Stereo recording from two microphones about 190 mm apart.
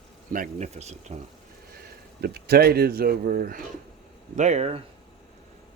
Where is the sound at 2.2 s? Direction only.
55° right (ahead or behind).